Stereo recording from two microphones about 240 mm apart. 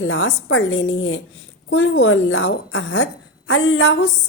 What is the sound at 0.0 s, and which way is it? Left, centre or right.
A woman's voice, left.